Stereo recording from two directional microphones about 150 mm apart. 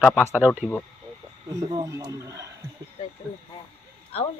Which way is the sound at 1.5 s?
20° right (ahead or behind).